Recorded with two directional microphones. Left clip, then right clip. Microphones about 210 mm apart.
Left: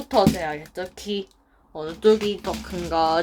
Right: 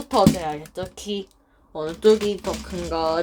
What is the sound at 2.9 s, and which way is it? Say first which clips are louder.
Speech: left 2 dB; 10° left (ahead or behind).